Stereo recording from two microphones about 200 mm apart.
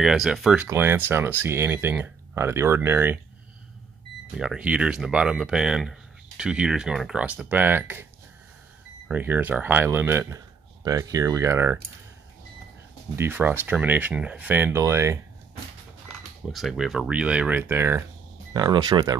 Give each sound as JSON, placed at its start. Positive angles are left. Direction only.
{"t": 0.0, "sound": "speech", "side_deg": 0}
{"t": 4.3, "sound": "speech", "side_deg": -5}
{"t": 13.1, "sound": "speech", "side_deg": -10}
{"t": 16.5, "sound": "speech", "side_deg": 0}
{"t": 18.5, "sound": "speech", "side_deg": -20}